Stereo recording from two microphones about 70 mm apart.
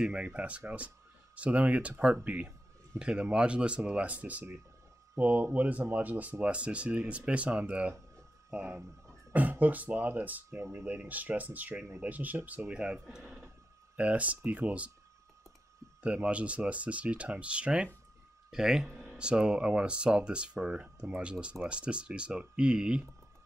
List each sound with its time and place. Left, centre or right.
0.0 s speech: centre
13.0 s speech: centre
13.9 s speech: centre
16.0 s speech: centre